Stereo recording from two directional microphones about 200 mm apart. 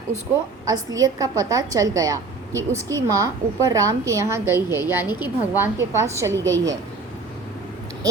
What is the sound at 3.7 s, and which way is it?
A woman's voice, 15° right (ahead or behind).